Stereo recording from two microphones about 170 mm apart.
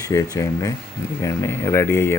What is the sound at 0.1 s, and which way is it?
Speech, 20° left (ahead or behind).